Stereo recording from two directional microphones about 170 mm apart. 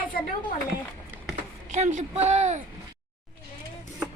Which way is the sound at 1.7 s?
45° right (ahead or behind).